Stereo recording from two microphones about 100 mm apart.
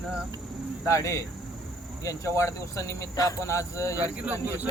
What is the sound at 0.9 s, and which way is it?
Speech, 30° left (ahead or behind).